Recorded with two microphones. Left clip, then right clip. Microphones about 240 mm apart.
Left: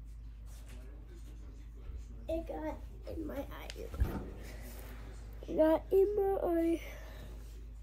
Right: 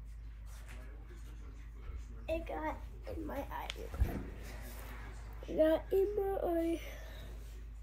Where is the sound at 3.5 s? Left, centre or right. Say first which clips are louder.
Right 5 dB; centre.